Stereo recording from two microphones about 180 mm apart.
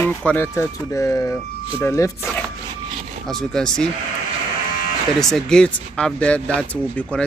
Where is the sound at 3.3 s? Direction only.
5° left (ahead or behind).